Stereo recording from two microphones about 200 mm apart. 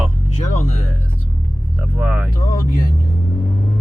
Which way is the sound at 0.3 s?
35° left (ahead or behind).